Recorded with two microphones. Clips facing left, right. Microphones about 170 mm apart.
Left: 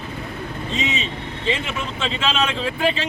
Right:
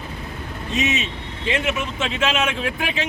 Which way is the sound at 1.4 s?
10° right (ahead or behind).